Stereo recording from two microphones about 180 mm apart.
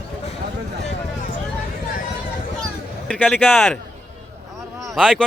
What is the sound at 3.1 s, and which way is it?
Speech, 10° left (ahead or behind).